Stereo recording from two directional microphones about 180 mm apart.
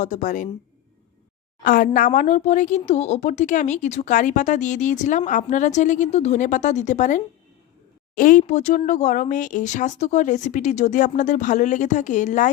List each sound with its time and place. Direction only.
0.0 s speech: 45° left (ahead or behind)
1.6 s speech: 50° left (ahead or behind)